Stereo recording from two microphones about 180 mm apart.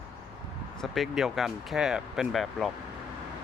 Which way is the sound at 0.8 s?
Centre (ahead or behind).